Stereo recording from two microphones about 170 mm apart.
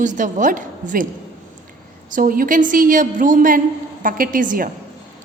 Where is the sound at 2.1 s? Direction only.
55° right (ahead or behind).